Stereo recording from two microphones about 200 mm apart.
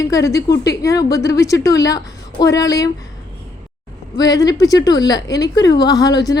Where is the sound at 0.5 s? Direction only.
55° left (ahead or behind).